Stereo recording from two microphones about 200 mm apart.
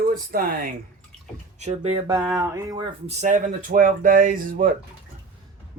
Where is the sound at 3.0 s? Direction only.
40° right (ahead or behind).